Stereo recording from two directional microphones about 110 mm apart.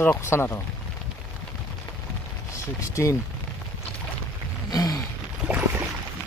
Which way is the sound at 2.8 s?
30° left (ahead or behind).